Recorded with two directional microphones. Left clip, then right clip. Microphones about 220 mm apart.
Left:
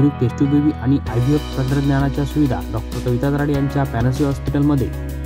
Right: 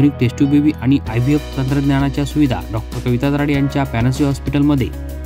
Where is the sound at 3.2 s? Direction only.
85° right.